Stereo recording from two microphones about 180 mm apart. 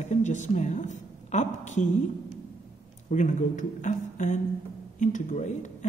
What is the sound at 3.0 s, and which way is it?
A woman's voice, 45° left (ahead or behind).